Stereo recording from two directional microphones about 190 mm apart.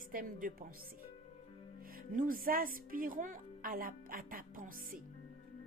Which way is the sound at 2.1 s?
45° right (ahead or behind).